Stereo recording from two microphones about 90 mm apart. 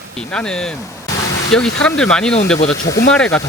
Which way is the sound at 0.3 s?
10° left (ahead or behind).